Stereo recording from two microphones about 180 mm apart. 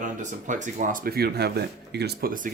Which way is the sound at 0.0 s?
45° right (ahead or behind).